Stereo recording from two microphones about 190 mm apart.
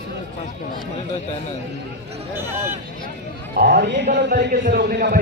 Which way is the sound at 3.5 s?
60° right (ahead or behind).